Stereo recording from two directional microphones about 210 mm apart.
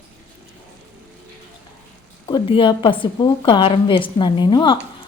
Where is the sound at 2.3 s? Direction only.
25° left (ahead or behind).